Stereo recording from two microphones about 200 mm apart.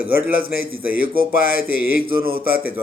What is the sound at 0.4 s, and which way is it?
Speech, 50° left (ahead or behind).